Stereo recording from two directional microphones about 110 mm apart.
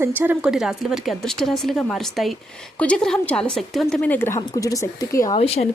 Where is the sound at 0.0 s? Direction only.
20° right (ahead or behind).